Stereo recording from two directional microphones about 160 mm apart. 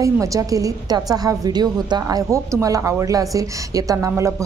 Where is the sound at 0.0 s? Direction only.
20° right (ahead or behind).